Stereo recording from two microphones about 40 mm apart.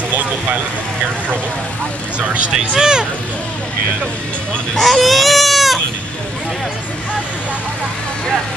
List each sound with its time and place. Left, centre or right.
2.1 s speech: right
2.7 s speech: centre
4.7 s baby cry: centre